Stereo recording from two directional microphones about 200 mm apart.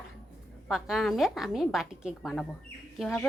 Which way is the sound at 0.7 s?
Centre (ahead or behind).